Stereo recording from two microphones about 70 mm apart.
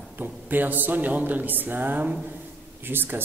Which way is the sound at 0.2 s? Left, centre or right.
Right.